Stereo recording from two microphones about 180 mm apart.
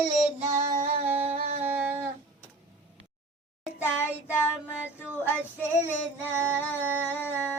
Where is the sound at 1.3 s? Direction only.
50° right (ahead or behind).